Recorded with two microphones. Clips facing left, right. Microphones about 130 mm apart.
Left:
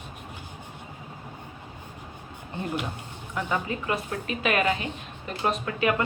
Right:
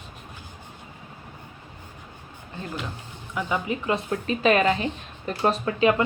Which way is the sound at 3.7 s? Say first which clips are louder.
Right 4 dB; 25° right (ahead or behind).